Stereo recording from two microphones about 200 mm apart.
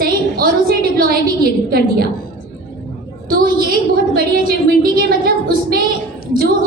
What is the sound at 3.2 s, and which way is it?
A woman's voice, 45° right (ahead or behind).